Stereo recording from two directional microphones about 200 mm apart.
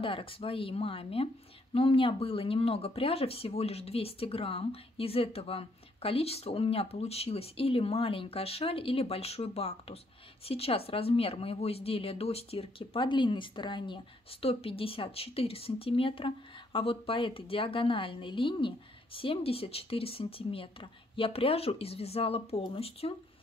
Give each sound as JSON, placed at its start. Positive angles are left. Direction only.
{"t": 0.0, "sound": "a woman's voice", "side_deg": 25}